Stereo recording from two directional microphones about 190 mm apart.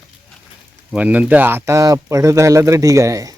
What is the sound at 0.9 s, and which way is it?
Speech, 5° right (ahead or behind).